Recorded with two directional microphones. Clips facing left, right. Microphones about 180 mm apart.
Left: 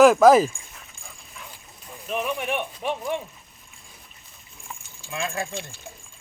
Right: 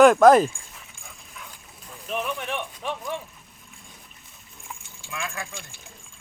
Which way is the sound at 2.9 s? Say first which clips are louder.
Left 4 dB; 20° left (ahead or behind).